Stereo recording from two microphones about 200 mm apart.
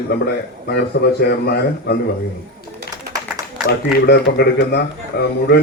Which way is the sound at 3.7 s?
50° left (ahead or behind).